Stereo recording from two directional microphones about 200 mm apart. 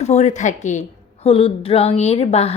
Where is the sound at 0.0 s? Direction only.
35° left (ahead or behind).